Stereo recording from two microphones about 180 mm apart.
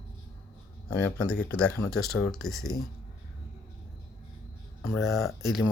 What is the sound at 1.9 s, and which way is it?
Speech, centre (ahead or behind).